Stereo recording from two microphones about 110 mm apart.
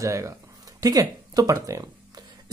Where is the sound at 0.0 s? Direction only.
30° right (ahead or behind).